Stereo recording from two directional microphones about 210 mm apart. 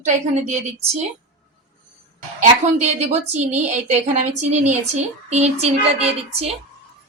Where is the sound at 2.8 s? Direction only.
35° right (ahead or behind).